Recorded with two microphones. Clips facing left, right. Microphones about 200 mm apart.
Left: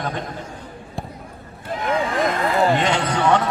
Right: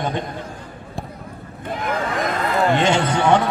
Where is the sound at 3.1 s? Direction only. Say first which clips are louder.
Right 2 dB; 25° right (ahead or behind).